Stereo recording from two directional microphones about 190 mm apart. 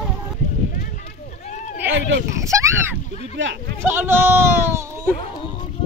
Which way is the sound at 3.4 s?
80° right.